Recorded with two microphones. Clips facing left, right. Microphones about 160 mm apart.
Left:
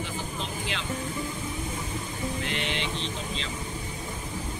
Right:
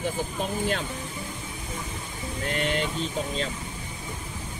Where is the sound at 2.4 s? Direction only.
45° right (ahead or behind).